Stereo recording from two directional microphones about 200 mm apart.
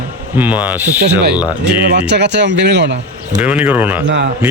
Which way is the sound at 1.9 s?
60° right (ahead or behind).